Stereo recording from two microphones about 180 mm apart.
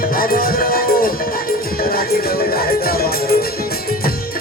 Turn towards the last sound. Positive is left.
turn(degrees=55)  # may be behind; listen again after turning